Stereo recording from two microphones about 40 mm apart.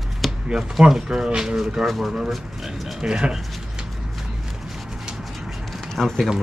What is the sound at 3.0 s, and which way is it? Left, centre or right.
Speech, centre.